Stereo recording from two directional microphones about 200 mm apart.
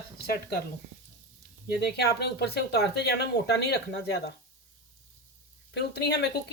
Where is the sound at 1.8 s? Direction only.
55° left (ahead or behind).